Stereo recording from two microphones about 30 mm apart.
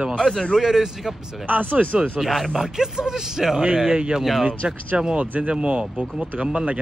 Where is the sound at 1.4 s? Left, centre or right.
Right.